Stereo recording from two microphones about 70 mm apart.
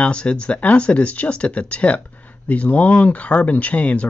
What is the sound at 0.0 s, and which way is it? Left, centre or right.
Speech, centre.